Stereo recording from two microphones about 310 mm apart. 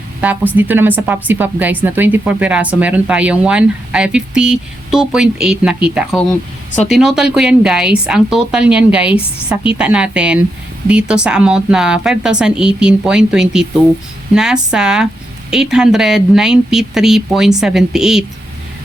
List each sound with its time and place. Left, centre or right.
0.2 s speech: centre